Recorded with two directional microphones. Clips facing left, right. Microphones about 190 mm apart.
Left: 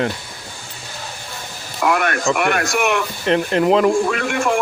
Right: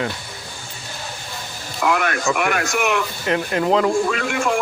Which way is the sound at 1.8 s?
50° left (ahead or behind).